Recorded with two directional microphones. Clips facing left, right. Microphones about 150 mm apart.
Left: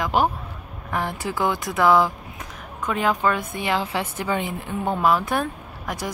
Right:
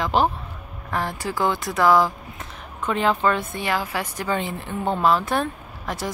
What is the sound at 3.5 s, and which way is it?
Speech, 20° left (ahead or behind).